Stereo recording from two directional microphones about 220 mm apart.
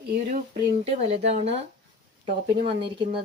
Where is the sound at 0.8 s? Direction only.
30° right (ahead or behind).